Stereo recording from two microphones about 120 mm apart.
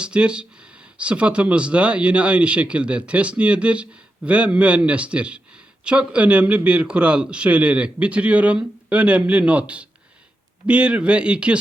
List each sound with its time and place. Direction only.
0.0 s speech: 10° right (ahead or behind)